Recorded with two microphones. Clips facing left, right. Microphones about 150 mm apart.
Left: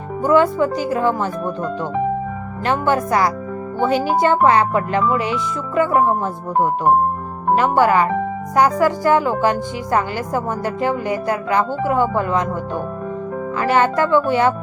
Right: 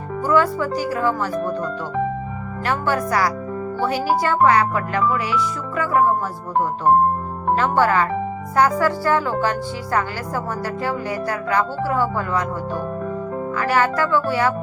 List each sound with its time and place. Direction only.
0.2 s speech: 20° left (ahead or behind)
2.6 s speech: 20° left (ahead or behind)
7.5 s speech: 15° left (ahead or behind)
13.6 s speech: 20° left (ahead or behind)